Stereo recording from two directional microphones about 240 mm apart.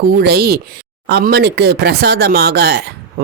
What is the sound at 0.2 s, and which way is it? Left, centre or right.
A woman's voice, right.